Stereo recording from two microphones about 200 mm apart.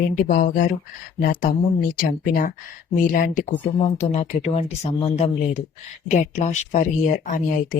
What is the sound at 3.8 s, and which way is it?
Speech, 30° left (ahead or behind).